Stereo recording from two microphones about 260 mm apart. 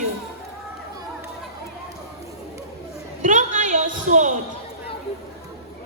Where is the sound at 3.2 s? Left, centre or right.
Right.